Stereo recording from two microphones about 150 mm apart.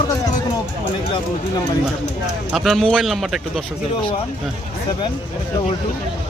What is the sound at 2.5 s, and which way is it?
Speech, centre (ahead or behind).